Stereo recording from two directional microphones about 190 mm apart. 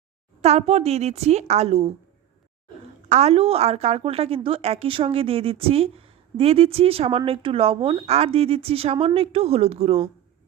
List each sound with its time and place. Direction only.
0.4 s a woman's voice: 35° right (ahead or behind)
3.1 s a woman's voice: 35° right (ahead or behind)